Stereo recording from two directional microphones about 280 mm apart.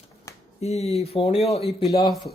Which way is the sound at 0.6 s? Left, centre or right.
Left.